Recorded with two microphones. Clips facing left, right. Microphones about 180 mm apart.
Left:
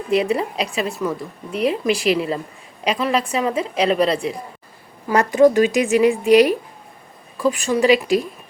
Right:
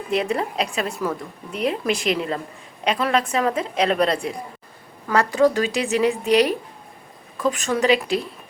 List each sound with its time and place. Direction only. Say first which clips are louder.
0.1 s a woman's voice: left 4 dB; 5° left (ahead or behind)
5.0 s a woman's voice: left 4 dB; 15° left (ahead or behind)
7.9 s a woman's voice: left 4 dB; 10° left (ahead or behind)